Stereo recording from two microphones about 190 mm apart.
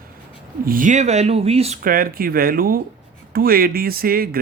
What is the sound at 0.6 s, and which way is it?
Speech, 45° right (ahead or behind).